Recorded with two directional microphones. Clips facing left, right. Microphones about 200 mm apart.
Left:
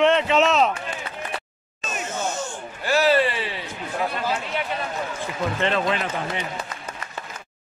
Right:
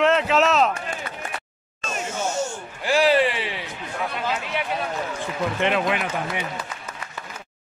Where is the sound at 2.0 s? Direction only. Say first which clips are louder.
Right 2 dB; 10° right (ahead or behind).